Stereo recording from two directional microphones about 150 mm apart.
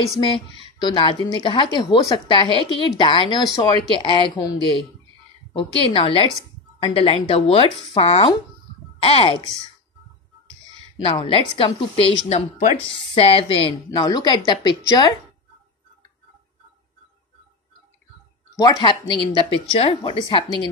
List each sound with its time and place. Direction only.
0.7 s a woman's voice: 30° left (ahead or behind)
11.0 s a woman's voice: 40° left (ahead or behind)
13.8 s a woman's voice: 25° left (ahead or behind)
18.6 s a woman's voice: 30° left (ahead or behind)